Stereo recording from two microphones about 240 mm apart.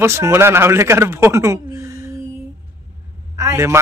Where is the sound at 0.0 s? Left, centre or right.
Centre.